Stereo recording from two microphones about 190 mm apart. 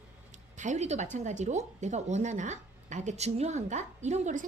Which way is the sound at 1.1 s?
40° right (ahead or behind).